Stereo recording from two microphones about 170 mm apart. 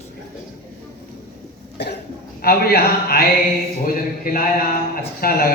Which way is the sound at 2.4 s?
65° left (ahead or behind).